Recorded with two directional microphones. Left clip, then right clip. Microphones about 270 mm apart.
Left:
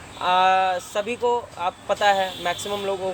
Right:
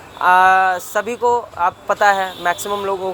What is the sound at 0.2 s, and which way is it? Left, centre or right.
Speech, centre.